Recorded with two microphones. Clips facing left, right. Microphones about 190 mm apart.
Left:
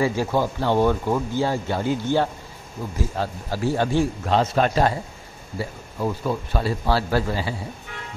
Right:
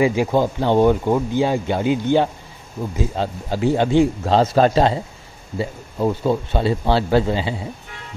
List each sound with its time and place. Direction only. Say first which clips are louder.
0.0 s speech: right 4 dB; 15° right (ahead or behind)
4.3 s a man's voice: right 5 dB; 35° right (ahead or behind)